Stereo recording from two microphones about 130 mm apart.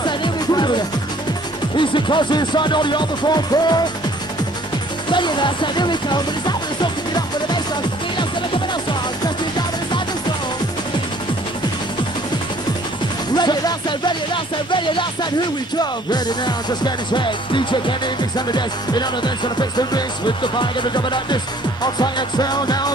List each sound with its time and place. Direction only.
0.0 s music: 35° left (ahead or behind)
5.1 s music: 35° left (ahead or behind)
9.2 s music: 30° left (ahead or behind)
13.3 s music: 35° left (ahead or behind)